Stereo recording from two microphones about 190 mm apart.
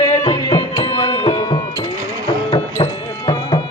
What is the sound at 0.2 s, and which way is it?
Music, 25° left (ahead or behind).